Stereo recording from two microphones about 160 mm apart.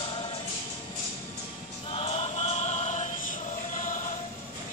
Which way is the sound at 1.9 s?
40° left (ahead or behind).